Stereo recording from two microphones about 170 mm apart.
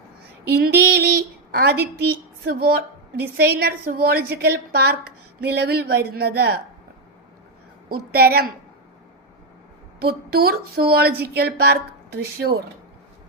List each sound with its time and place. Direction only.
0.5 s speech: 65° right (ahead or behind)
7.9 s speech: 65° right (ahead or behind)
10.0 s speech: 65° right (ahead or behind)